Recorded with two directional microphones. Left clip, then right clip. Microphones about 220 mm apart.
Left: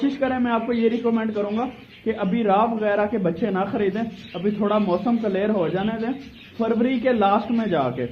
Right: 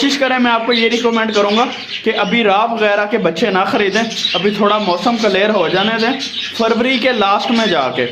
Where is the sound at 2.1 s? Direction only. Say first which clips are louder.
Right 8 dB; 20° right (ahead or behind).